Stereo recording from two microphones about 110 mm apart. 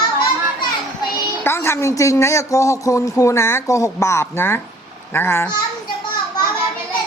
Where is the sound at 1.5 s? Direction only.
25° left (ahead or behind).